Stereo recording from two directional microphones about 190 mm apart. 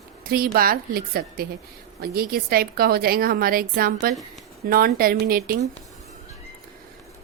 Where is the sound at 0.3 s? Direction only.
50° right (ahead or behind).